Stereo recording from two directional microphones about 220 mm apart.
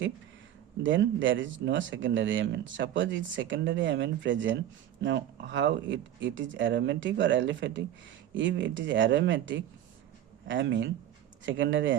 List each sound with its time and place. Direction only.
0.8 s speech: 60° right (ahead or behind)